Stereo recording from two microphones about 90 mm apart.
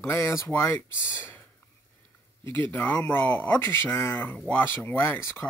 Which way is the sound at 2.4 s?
20° left (ahead or behind).